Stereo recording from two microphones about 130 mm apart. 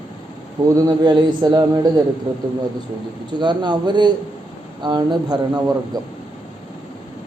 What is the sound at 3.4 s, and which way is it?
A man's voice, 35° right (ahead or behind).